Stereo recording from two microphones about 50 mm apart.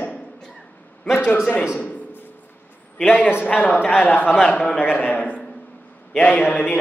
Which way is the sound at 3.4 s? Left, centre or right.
Left.